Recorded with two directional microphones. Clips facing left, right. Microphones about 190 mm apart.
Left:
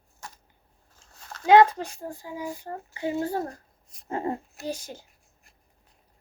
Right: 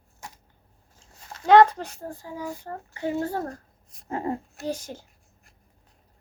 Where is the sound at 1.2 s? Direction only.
10° right (ahead or behind).